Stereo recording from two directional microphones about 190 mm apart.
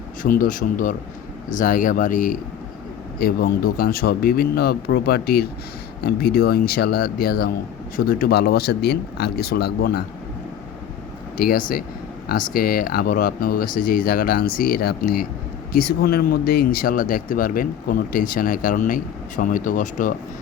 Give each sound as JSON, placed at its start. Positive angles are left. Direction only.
{"t": 0.2, "sound": "speech", "side_deg": 45}
{"t": 11.3, "sound": "speech", "side_deg": 50}